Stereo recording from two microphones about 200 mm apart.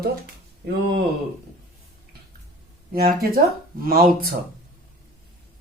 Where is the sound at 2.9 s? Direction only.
50° right (ahead or behind).